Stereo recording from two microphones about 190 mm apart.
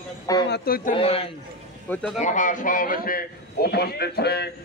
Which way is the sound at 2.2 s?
40° left (ahead or behind).